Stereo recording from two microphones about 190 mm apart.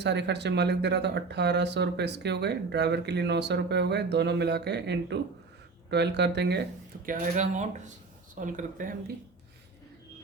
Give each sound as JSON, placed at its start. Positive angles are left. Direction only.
{"t": 0.0, "sound": "speech", "side_deg": -65}
{"t": 7.0, "sound": "speech", "side_deg": -40}